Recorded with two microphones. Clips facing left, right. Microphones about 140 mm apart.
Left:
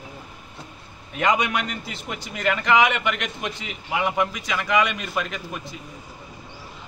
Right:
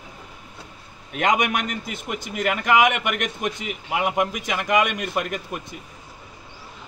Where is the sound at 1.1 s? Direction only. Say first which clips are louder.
Right 1 dB; 60° right (ahead or behind).